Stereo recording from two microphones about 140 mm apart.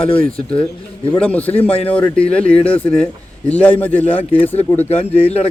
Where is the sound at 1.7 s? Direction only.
45° left (ahead or behind).